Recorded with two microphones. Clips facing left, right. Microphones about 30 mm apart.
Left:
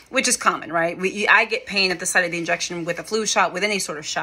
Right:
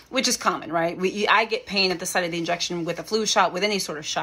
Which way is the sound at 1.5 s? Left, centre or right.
Left.